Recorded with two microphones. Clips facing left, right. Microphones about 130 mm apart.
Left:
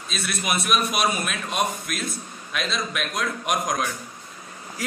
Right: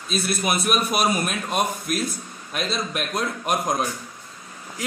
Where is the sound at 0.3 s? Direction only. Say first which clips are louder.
Right 1 dB; 35° right (ahead or behind).